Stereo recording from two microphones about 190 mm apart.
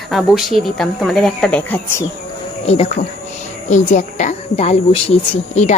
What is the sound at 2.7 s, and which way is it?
Speech, 30° left (ahead or behind).